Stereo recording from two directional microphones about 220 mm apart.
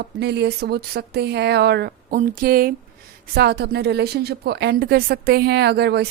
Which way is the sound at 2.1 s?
40° right (ahead or behind).